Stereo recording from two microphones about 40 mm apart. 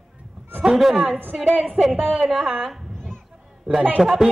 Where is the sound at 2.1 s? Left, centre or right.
Centre.